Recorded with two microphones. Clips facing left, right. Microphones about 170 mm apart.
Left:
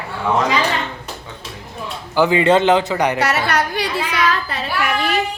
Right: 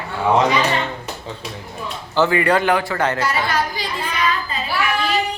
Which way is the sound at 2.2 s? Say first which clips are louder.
Left 3 dB; 20° left (ahead or behind).